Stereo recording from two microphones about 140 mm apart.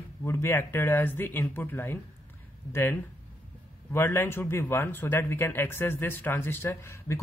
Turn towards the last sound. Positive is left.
turn(degrees=20)  # may be behind; listen again after turning